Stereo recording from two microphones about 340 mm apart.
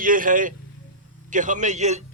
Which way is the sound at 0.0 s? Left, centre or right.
Right.